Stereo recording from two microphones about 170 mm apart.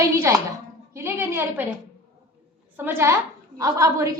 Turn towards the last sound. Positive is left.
turn(degrees=-15)  # may be behind; listen again after turning